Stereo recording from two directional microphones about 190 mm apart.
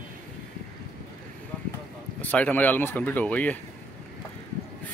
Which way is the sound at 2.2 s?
10° left (ahead or behind).